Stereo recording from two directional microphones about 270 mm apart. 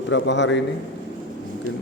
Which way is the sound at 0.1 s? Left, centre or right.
Left.